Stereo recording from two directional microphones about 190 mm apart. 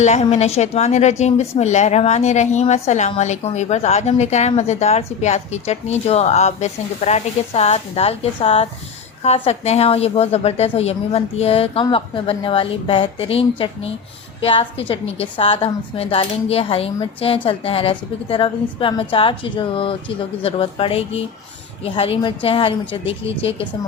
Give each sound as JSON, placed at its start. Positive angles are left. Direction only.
{"t": 0.0, "sound": "speech", "side_deg": 35}